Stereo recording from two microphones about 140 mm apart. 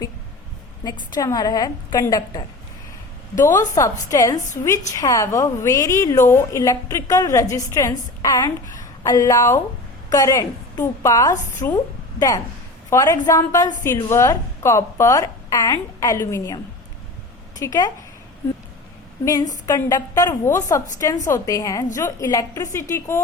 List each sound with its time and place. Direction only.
0.9 s a woman's voice: 30° left (ahead or behind)
3.4 s a woman's voice: 20° left (ahead or behind)
12.9 s a woman's voice: 20° left (ahead or behind)
17.6 s a woman's voice: 25° left (ahead or behind)
19.2 s a woman's voice: 25° left (ahead or behind)